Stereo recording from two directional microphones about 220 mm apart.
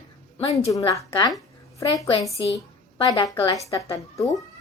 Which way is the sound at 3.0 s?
20° left (ahead or behind).